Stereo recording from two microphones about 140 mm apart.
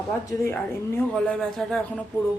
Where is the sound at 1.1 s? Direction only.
5° left (ahead or behind).